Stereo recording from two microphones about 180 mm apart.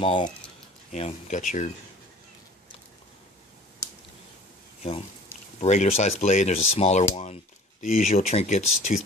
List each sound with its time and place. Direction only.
0.0 s speech: 30° left (ahead or behind)
0.9 s speech: 40° left (ahead or behind)
5.6 s speech: 40° left (ahead or behind)